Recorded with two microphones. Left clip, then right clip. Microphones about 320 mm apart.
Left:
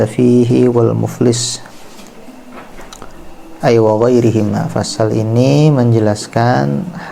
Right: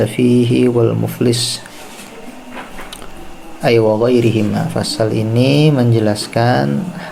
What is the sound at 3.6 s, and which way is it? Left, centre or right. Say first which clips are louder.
A man's voice: left 2 dB; left.